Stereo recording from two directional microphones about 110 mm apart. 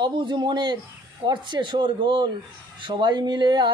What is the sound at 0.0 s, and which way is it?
Speech, 45° right (ahead or behind).